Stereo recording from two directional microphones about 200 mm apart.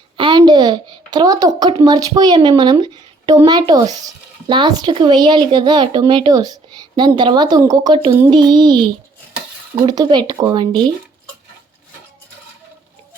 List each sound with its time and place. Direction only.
0.2 s a woman's voice: 25° right (ahead or behind)